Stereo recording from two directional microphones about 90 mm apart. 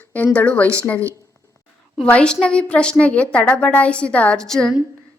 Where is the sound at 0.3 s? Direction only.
15° left (ahead or behind).